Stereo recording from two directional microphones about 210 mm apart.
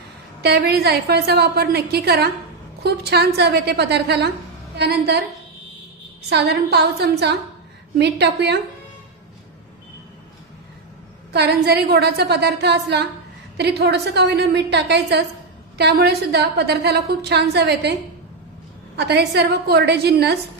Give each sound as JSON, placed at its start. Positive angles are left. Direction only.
{"t": 0.4, "sound": "a woman's voice", "side_deg": -50}
{"t": 6.2, "sound": "a woman's voice", "side_deg": -50}
{"t": 11.3, "sound": "a woman's voice", "side_deg": -50}
{"t": 18.9, "sound": "a woman's voice", "side_deg": -50}